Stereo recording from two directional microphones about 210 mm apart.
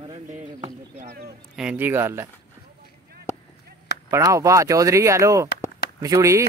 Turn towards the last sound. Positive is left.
turn(degrees=-15)  # may be behind; listen again after turning